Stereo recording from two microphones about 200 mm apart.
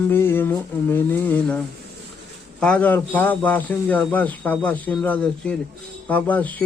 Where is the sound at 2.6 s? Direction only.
5° left (ahead or behind).